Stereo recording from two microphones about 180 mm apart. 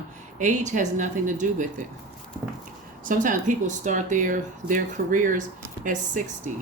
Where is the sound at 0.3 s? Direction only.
40° right (ahead or behind).